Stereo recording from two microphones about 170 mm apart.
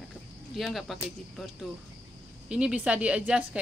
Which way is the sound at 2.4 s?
5° right (ahead or behind).